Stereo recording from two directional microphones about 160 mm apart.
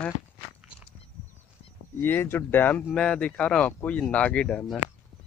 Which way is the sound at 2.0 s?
15° left (ahead or behind).